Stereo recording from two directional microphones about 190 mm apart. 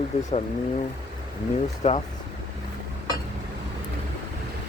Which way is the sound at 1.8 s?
35° left (ahead or behind).